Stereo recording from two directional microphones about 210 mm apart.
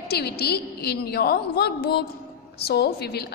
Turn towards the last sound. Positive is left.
turn(degrees=50)  # may be behind; listen again after turning